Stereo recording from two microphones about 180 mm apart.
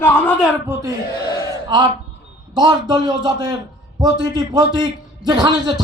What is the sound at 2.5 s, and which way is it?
A man's voice, 25° right (ahead or behind).